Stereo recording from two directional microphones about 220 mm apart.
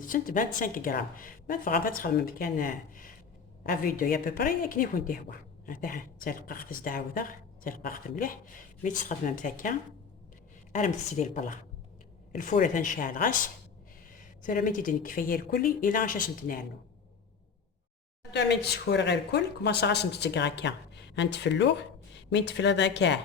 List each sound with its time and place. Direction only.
0.0 s speech: 40° left (ahead or behind)
14.4 s speech: 35° left (ahead or behind)
18.2 s speech: 50° left (ahead or behind)